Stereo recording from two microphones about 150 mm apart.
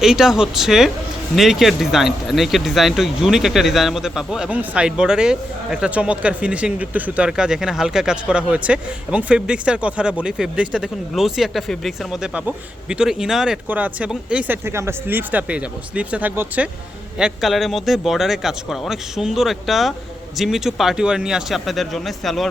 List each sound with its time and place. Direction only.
0.0 s speech: 5° right (ahead or behind)